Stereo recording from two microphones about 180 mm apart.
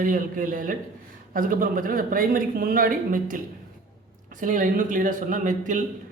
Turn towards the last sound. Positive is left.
turn(degrees=-45)  # may be behind; listen again after turning